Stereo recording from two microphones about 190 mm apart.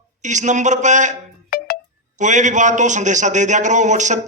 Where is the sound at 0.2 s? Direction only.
40° right (ahead or behind).